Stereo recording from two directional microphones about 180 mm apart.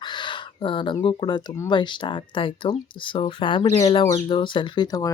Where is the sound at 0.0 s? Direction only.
25° left (ahead or behind).